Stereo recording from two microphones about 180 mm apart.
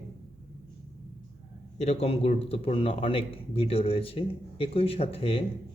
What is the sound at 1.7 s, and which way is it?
A man's voice, 35° left (ahead or behind).